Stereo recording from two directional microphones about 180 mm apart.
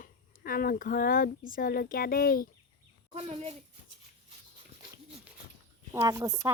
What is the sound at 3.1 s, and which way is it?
Speech, 35° right (ahead or behind).